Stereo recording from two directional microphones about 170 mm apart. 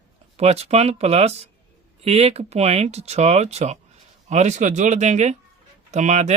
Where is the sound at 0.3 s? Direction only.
40° right (ahead or behind).